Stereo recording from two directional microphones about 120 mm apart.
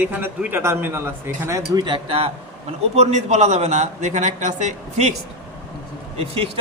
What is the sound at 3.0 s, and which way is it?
A man's voice, 70° right (ahead or behind).